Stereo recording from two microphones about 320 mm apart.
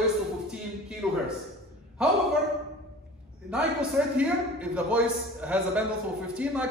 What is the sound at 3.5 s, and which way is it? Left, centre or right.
A man's voice, centre.